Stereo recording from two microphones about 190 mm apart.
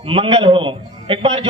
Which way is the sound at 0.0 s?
30° right (ahead or behind).